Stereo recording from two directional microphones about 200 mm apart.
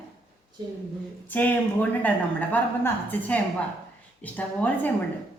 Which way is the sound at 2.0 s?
10° left (ahead or behind).